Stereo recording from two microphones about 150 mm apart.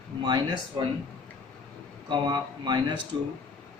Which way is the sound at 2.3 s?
30° right (ahead or behind).